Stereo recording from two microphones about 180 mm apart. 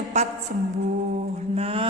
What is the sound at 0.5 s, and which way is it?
Music, 50° right (ahead or behind).